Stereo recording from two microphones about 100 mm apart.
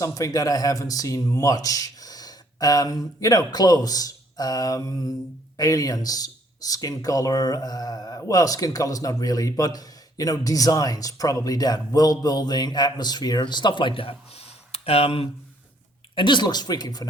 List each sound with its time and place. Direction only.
0.0 s speech: 35° left (ahead or behind); by 15.3 s 80° left
16.1 s speech: 50° left (ahead or behind)